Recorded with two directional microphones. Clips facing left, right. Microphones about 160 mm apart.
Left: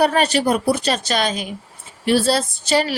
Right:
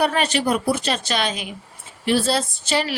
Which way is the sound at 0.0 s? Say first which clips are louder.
Left 4 dB; 40° left (ahead or behind).